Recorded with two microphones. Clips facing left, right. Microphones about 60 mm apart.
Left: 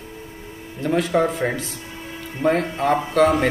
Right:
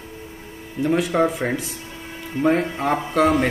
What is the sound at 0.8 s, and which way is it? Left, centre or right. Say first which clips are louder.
Speech: even; centre.